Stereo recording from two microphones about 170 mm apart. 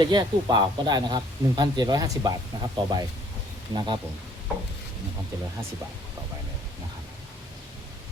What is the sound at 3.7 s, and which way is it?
Speech, 25° right (ahead or behind).